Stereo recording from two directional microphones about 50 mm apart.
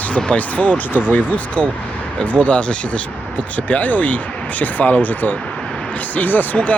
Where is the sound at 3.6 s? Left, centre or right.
Left.